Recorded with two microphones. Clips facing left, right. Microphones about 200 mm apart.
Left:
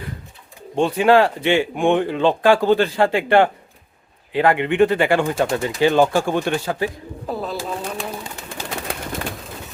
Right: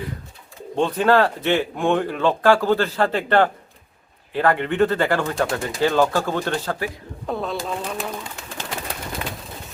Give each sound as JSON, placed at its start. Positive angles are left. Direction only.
{"t": 0.8, "sound": "speech", "side_deg": 10}
{"t": 7.3, "sound": "bird", "side_deg": 5}